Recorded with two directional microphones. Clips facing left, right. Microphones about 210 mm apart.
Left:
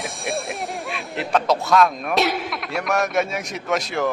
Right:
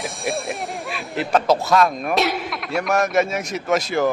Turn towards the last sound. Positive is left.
turn(degrees=0)  # may be behind; listen again after turning